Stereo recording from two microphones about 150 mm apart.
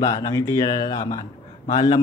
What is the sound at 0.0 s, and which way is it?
Speech, 20° left (ahead or behind).